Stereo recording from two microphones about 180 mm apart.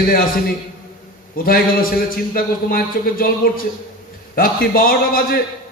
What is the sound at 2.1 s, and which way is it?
A man's voice, 50° left (ahead or behind).